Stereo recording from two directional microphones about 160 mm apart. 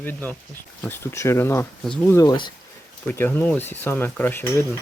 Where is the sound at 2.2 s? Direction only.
25° left (ahead or behind).